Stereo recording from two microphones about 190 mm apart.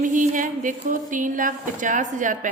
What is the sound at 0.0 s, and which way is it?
A woman's voice, 45° right (ahead or behind).